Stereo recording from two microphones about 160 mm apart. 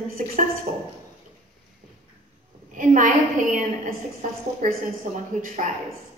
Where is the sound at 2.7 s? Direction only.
55° right (ahead or behind).